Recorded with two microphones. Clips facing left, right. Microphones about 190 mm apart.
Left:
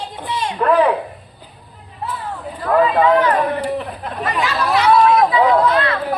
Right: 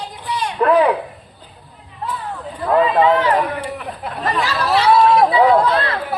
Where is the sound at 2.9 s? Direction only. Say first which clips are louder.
Even; 25° right (ahead or behind).